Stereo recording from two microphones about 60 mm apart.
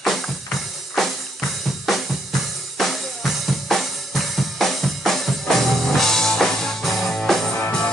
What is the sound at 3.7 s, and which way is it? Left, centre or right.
Drum kit, centre.